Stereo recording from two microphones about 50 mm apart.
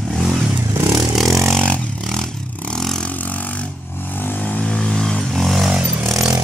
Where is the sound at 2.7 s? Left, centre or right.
Centre.